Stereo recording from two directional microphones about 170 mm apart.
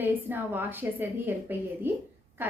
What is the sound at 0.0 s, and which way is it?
A woman's voice, 10° right (ahead or behind).